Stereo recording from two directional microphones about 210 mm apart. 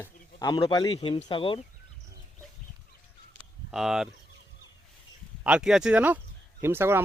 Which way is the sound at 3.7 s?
Centre (ahead or behind).